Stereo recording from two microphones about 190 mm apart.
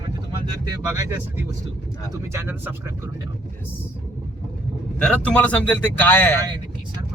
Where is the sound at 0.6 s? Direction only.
20° right (ahead or behind).